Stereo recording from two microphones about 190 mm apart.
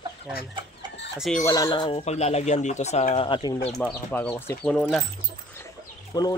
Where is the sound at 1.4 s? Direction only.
15° left (ahead or behind).